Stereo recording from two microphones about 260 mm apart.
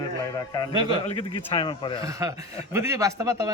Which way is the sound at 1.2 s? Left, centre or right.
Centre.